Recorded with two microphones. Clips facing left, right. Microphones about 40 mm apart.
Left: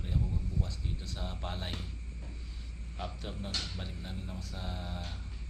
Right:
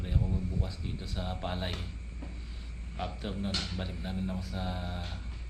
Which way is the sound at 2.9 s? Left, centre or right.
Centre.